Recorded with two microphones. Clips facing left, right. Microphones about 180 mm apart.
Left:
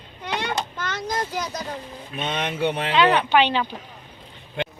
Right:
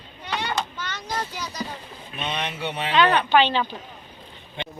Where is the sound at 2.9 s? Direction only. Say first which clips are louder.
Even; 20° left (ahead or behind).